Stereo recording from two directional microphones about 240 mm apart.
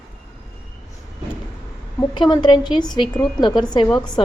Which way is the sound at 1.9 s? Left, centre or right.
Centre.